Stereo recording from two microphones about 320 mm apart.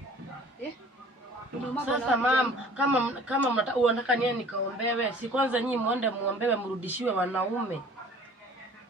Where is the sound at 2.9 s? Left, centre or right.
Centre.